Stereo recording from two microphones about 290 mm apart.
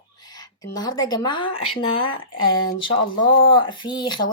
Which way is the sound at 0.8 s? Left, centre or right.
Centre.